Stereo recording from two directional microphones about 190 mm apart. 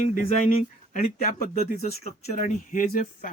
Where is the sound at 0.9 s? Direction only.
45° left (ahead or behind).